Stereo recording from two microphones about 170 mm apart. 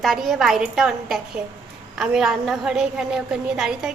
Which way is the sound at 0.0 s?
Centre (ahead or behind).